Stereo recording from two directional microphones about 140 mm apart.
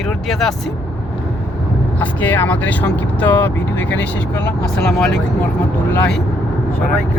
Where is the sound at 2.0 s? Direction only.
15° left (ahead or behind).